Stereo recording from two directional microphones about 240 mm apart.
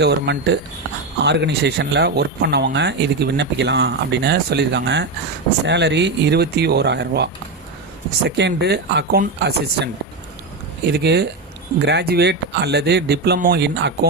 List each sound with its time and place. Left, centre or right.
0.0 s speech: right
8.4 s speech: right
10.8 s speech: right